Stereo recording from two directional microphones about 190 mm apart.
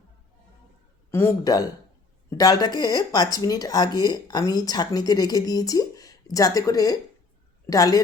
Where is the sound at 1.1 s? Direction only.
15° left (ahead or behind).